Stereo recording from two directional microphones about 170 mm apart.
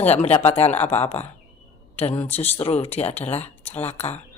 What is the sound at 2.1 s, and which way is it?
Speech, 10° left (ahead or behind).